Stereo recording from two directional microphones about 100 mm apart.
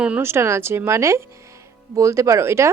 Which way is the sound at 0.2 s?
25° right (ahead or behind).